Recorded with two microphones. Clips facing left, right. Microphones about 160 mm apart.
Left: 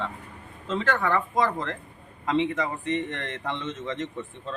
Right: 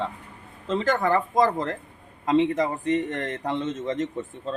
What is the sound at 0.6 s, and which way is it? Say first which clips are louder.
Speech: right 3 dB; 35° right (ahead or behind).